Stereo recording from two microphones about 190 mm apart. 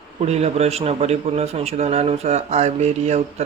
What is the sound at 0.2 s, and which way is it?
A man's voice, 35° right (ahead or behind).